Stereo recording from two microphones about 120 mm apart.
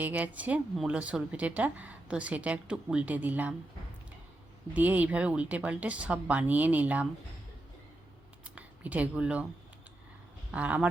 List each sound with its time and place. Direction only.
0.0 s speech: 15° right (ahead or behind)
4.7 s speech: 15° right (ahead or behind)
8.4 s speech: 10° right (ahead or behind)
10.5 s speech: 10° right (ahead or behind)